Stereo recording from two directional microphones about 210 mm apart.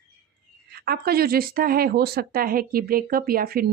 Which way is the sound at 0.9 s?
45° right (ahead or behind).